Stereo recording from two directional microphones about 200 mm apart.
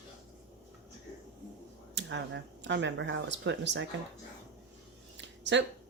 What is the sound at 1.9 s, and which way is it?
Speech, 60° right (ahead or behind).